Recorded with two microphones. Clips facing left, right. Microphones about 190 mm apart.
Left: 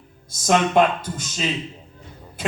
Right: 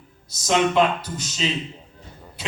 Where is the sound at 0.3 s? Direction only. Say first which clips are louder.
Left 1 dB; 50° left (ahead or behind).